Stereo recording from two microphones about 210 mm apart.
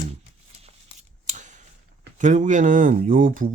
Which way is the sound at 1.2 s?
35° right (ahead or behind).